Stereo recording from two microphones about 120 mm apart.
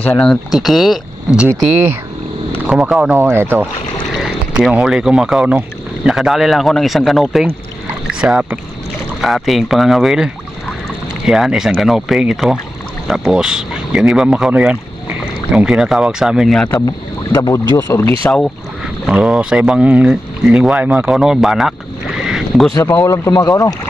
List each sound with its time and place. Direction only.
0.0 s speech: 10° left (ahead or behind)
0.5 s speech: centre (ahead or behind)
3.2 s speech: 20° right (ahead or behind)
4.1 s speech: centre (ahead or behind)
16.8 s speech: 30° left (ahead or behind)
19.0 s speech: 5° right (ahead or behind)
23.0 s speech: 25° left (ahead or behind)